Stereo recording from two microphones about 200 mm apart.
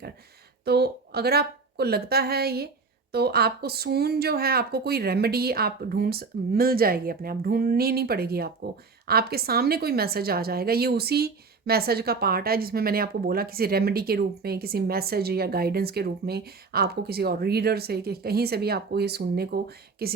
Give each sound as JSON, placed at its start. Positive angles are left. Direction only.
{"t": 0.6, "sound": "a woman's voice", "side_deg": -55}